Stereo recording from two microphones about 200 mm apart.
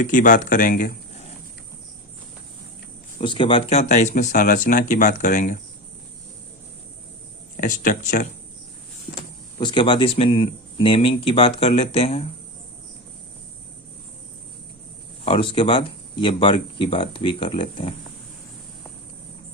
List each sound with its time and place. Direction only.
0.0 s speech: 40° left (ahead or behind)
3.2 s speech: 25° left (ahead or behind); by 5.5 s 40° left (ahead or behind)
7.5 s speech: 40° left (ahead or behind)
9.6 s speech: 25° left (ahead or behind)
15.2 s speech: 25° left (ahead or behind)